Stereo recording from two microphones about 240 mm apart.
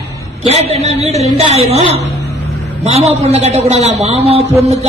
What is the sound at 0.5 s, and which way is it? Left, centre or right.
A man's voice, right.